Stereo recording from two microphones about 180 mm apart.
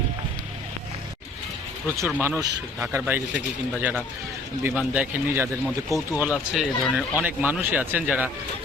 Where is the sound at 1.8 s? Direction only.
15° right (ahead or behind).